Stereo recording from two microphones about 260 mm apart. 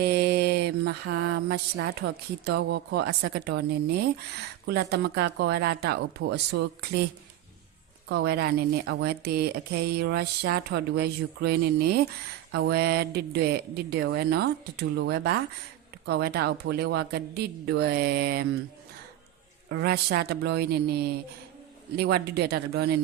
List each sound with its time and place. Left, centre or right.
0.0 s mantra: right
2.5 s a woman's voice: right
8.1 s a woman's voice: right
19.6 s a woman's voice: right